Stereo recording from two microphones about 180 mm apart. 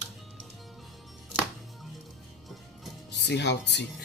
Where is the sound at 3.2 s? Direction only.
70° left (ahead or behind).